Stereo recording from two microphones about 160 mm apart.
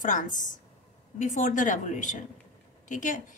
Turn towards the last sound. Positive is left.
turn(degrees=50)  # may be behind; listen again after turning